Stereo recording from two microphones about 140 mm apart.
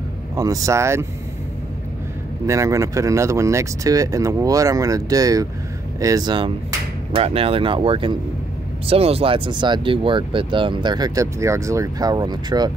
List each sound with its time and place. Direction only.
0.4 s speech: 25° right (ahead or behind)
2.4 s speech: 20° right (ahead or behind)
7.2 s speech: 45° right (ahead or behind)